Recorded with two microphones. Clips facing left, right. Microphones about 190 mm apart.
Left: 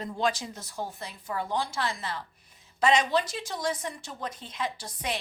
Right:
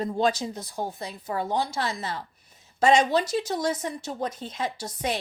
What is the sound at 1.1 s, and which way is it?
Speech, 30° right (ahead or behind).